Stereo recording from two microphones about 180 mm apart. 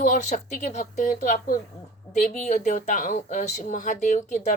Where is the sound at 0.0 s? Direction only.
40° left (ahead or behind).